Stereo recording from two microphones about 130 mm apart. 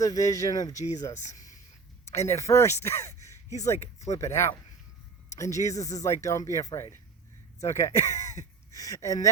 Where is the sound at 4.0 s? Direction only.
25° left (ahead or behind).